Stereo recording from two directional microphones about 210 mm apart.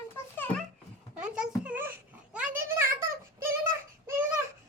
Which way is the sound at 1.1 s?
5° right (ahead or behind).